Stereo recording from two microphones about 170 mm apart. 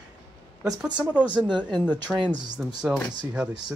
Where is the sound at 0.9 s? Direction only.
25° right (ahead or behind).